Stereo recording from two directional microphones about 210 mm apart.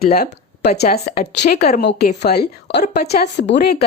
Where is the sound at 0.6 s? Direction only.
50° left (ahead or behind).